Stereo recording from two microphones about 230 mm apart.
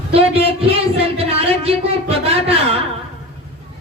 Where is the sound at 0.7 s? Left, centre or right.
Right.